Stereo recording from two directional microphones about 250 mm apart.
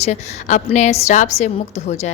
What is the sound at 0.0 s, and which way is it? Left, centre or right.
A woman's voice, left.